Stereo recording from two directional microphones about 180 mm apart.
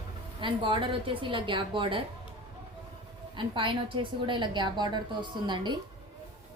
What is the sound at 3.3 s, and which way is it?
A woman's voice, 30° right (ahead or behind).